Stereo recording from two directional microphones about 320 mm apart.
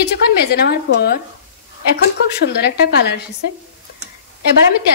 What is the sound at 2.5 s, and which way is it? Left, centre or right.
Speech, left.